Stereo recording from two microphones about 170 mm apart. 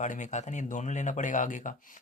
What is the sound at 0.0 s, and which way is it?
Speech, 45° left (ahead or behind).